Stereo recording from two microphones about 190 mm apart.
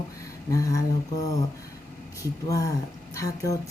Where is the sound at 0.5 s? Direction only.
15° left (ahead or behind).